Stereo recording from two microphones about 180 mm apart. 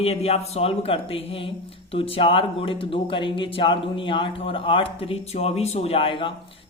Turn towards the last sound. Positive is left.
turn(degrees=30)  # may be behind; listen again after turning